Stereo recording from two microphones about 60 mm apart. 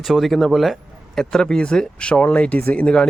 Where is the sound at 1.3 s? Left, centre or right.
Centre.